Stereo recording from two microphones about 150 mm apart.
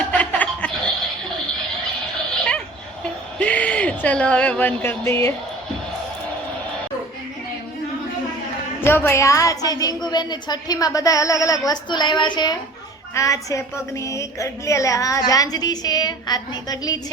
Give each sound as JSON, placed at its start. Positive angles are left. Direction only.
{"t": 0.1, "sound": "chuckle", "side_deg": 10}
{"t": 3.3, "sound": "speech", "side_deg": 10}
{"t": 8.8, "sound": "a woman's voice", "side_deg": 15}